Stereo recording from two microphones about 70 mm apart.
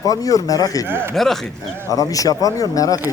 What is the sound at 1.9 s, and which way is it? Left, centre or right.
Speech, left.